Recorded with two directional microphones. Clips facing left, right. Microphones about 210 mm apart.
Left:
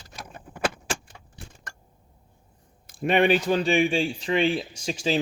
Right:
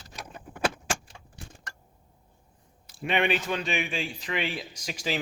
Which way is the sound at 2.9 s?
45° left (ahead or behind).